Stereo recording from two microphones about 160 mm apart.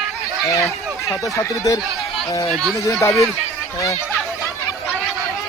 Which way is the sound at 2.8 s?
20° left (ahead or behind).